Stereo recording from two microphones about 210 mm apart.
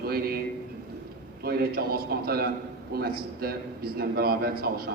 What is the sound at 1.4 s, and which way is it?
A man's voice, 45° right (ahead or behind).